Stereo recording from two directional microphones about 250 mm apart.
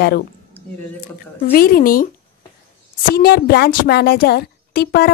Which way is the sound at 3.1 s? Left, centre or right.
Left.